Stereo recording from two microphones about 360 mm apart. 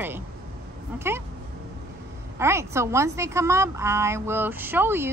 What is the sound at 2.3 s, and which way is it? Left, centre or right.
A woman's voice, centre.